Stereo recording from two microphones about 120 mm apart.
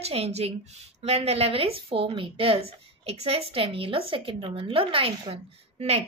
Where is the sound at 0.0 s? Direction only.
60° right (ahead or behind).